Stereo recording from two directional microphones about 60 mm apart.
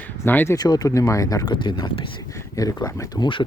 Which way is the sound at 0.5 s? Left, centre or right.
Left.